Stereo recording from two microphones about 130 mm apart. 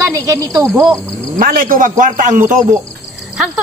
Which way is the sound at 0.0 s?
25° right (ahead or behind).